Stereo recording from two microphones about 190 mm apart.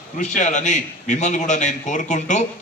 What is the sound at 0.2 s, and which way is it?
A man's voice, 40° left (ahead or behind).